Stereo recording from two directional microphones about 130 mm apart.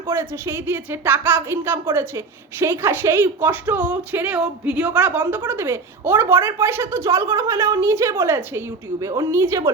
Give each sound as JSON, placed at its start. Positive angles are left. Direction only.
{"t": 0.1, "sound": "a woman's voice", "side_deg": -20}